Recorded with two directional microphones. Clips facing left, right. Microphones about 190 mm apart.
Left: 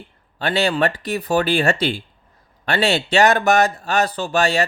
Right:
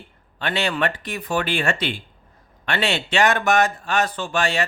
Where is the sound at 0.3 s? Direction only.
35° left (ahead or behind).